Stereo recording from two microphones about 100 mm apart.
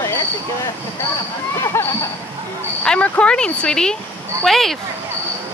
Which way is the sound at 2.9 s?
15° left (ahead or behind).